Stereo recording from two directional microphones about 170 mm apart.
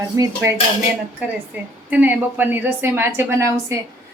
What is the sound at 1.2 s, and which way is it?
A woman's voice, 10° right (ahead or behind).